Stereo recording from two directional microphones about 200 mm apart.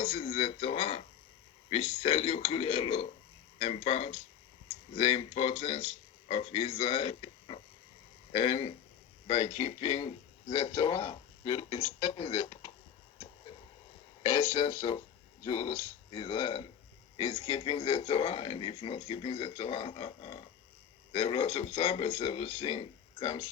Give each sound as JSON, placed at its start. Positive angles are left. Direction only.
{"t": 0.3, "sound": "speech", "side_deg": 30}
{"t": 11.0, "sound": "speech", "side_deg": 20}
{"t": 11.7, "sound": "speech", "side_deg": 30}
{"t": 14.6, "sound": "speech", "side_deg": 35}
{"t": 16.0, "sound": "speech", "side_deg": 25}